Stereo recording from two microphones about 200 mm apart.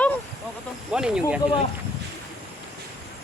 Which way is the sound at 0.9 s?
5° right (ahead or behind).